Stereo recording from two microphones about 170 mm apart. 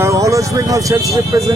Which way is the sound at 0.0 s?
20° right (ahead or behind).